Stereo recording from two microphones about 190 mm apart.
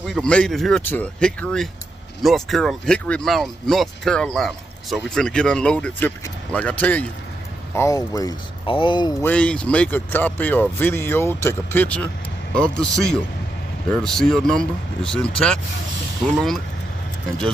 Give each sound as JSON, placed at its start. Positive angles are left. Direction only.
{"t": 0.0, "sound": "speech", "side_deg": 0}
{"t": 9.2, "sound": "speech", "side_deg": 5}